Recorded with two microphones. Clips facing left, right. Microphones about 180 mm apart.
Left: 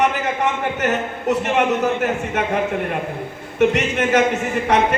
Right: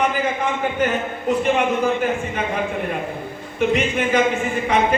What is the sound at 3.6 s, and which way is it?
Speech, 75° left (ahead or behind).